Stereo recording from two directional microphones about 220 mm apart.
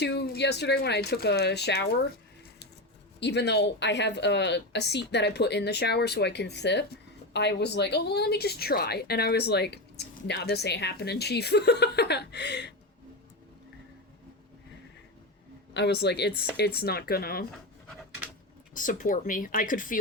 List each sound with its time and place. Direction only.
0.0 s a woman's voice: 50° left (ahead or behind)
3.2 s a woman's voice: 50° left (ahead or behind)
15.7 s a woman's voice: 50° left (ahead or behind)
18.7 s speech: 35° left (ahead or behind)